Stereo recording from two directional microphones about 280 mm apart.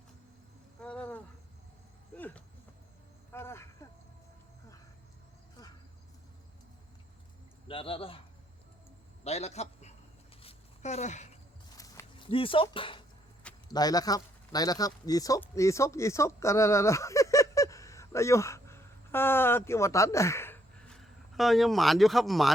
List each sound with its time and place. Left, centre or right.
0.8 s insect: centre
2.1 s a sound: centre
7.7 s a man's voice: centre
9.2 s a man's voice: left
10.4 s a sound: left
11.8 s walk: centre
13.4 s speech: centre